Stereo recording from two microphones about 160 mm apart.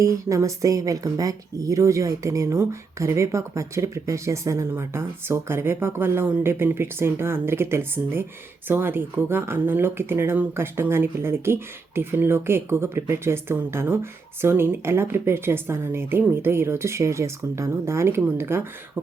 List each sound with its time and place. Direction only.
0.0 s speech: 20° right (ahead or behind)